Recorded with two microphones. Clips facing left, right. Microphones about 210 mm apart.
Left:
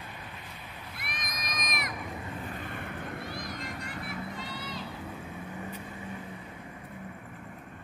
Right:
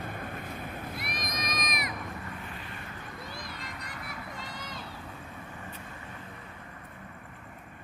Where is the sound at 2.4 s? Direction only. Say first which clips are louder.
Left 5 dB; 50° left (ahead or behind).